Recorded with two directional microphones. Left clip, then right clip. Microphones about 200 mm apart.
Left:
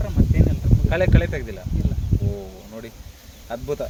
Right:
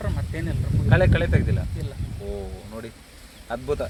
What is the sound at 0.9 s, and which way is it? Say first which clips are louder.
Speech: right 1 dB; 15° left (ahead or behind).